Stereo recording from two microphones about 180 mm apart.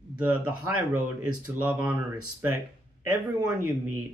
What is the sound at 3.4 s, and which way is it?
Speech, 10° right (ahead or behind).